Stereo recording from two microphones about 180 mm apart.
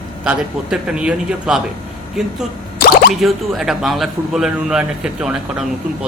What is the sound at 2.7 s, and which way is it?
Drip, 55° left (ahead or behind).